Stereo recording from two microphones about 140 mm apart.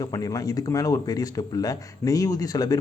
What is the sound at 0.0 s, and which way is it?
Speech, 25° left (ahead or behind).